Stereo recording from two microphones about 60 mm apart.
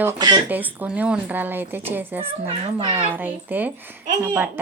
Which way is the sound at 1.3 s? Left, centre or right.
Right.